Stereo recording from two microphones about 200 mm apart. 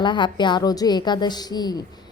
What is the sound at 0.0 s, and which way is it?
A woman's voice, 25° left (ahead or behind).